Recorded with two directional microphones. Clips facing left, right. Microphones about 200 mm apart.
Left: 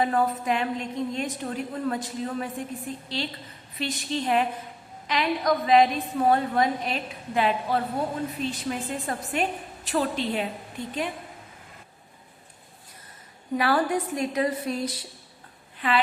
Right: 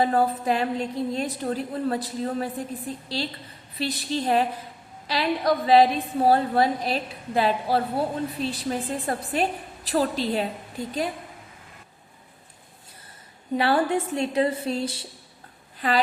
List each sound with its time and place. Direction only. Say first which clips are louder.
0.0 s a woman's voice: right 2 dB; 35° right (ahead or behind)
13.6 s a woman's voice: right 2 dB; 25° right (ahead or behind)
15.8 s a woman's voice: right 1 dB; 40° right (ahead or behind)